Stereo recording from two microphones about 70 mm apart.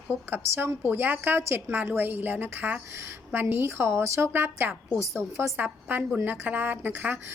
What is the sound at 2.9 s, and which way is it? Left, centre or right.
A woman's voice, right.